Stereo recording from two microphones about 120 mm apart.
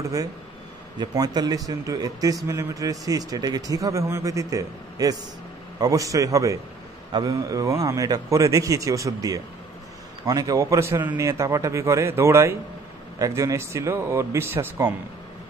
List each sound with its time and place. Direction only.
0.9 s a man's voice: 35° right (ahead or behind)